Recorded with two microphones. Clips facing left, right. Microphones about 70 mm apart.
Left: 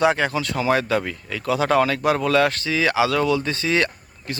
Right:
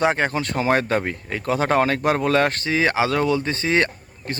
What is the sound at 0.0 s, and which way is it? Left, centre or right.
Speech, right.